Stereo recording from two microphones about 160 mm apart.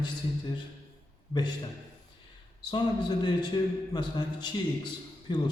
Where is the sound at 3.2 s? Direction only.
25° left (ahead or behind).